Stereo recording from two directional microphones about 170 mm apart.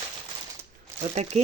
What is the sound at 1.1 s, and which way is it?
Speech, 40° right (ahead or behind).